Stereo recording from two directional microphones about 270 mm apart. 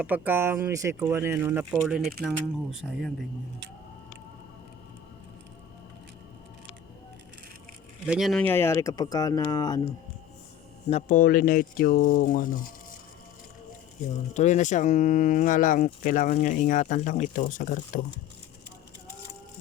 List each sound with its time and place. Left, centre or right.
0.0 s speech: centre
8.0 s speech: centre
10.8 s speech: left
14.3 s speech: left